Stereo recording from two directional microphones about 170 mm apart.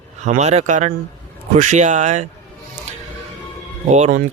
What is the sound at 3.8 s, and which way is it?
Speech, 40° right (ahead or behind).